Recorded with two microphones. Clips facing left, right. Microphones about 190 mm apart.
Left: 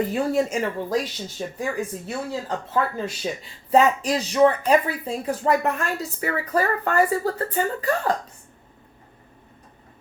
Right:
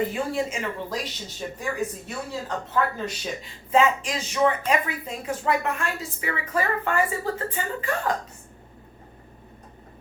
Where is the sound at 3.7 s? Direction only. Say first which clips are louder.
Left 3 dB; 40° left (ahead or behind).